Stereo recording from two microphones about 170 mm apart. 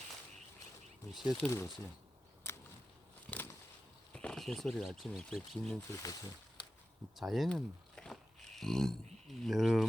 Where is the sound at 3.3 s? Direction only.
10° left (ahead or behind).